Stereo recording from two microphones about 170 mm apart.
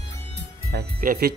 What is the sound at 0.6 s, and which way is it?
Speech, 65° right (ahead or behind).